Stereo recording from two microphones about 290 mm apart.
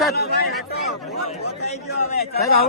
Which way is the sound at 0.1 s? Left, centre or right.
Left.